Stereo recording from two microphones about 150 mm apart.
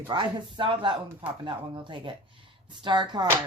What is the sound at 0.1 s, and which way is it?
Speech, 30° right (ahead or behind).